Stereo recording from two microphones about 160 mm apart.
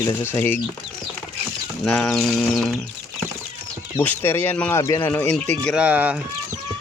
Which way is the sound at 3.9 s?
15° left (ahead or behind).